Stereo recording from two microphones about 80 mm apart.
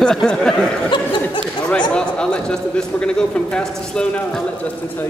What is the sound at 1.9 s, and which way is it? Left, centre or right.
A man's voice, centre.